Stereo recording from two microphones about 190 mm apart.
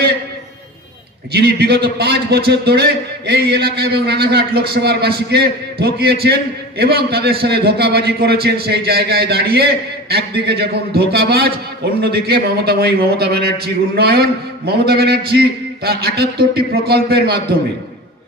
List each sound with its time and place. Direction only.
1.3 s a man's voice: 55° right (ahead or behind)